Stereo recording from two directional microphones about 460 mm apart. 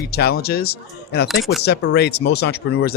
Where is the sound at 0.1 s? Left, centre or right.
Left.